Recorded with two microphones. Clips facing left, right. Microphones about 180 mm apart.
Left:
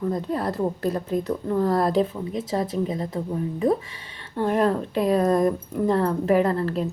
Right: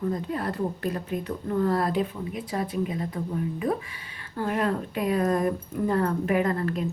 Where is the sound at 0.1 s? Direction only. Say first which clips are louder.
Left 3 dB; 35° left (ahead or behind).